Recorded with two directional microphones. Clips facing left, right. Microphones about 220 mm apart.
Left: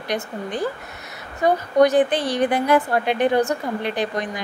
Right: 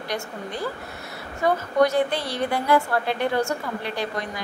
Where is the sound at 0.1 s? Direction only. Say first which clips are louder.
Left 5 dB; 20° left (ahead or behind).